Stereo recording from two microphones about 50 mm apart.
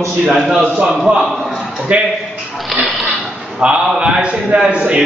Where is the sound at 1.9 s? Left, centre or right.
Right.